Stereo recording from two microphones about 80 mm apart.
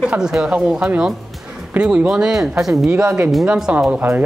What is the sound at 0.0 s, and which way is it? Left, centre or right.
A woman's voice, centre.